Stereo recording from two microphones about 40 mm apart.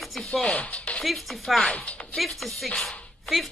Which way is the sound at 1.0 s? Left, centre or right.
Centre.